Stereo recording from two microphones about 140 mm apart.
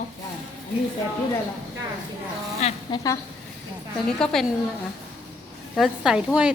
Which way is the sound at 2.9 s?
25° left (ahead or behind).